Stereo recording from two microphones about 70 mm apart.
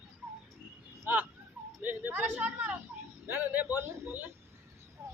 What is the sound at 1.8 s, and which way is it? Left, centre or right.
A man's voice, right.